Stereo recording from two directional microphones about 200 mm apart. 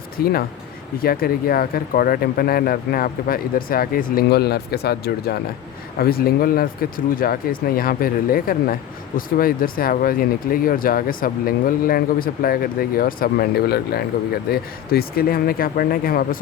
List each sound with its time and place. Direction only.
0.2 s speech: 50° left (ahead or behind)